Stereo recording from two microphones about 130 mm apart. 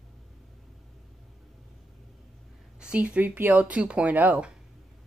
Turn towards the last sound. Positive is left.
turn(degrees=-10)  # may be behind; listen again after turning